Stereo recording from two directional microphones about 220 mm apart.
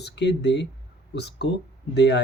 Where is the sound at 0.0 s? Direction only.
50° left (ahead or behind).